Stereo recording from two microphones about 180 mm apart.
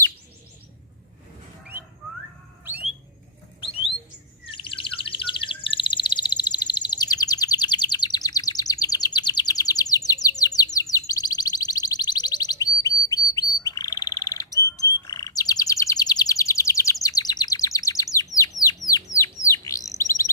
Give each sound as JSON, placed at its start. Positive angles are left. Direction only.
{"t": 2.7, "sound": "alarm", "side_deg": -10}
{"t": 4.5, "sound": "chirp", "side_deg": 30}
{"t": 14.8, "sound": "bird", "side_deg": 20}